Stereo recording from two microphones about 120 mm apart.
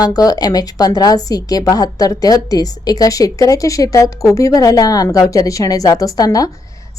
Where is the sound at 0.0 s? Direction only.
30° left (ahead or behind).